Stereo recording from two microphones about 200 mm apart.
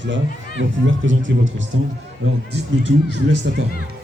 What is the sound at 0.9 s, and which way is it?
Speech, 70° right (ahead or behind).